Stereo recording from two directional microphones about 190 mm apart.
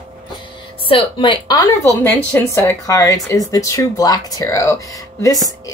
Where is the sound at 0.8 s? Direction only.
25° left (ahead or behind).